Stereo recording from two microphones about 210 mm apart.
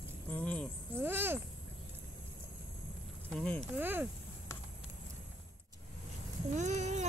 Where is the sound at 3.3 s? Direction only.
5° left (ahead or behind).